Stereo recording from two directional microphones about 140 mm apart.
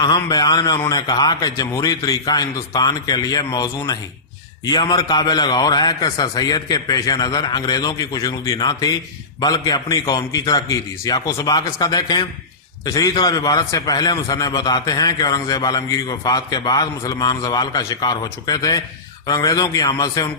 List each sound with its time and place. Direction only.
0.0 s a man's voice: 25° left (ahead or behind)